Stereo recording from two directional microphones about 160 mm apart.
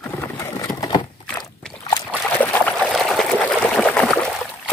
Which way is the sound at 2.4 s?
10° left (ahead or behind).